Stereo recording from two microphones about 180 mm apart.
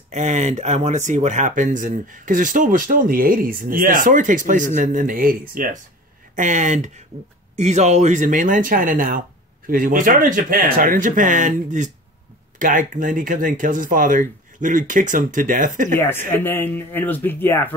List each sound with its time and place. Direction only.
0.1 s speech: 40° right (ahead or behind)
16.3 s speech: 10° left (ahead or behind)